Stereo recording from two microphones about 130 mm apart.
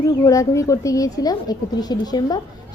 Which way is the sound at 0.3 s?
25° left (ahead or behind).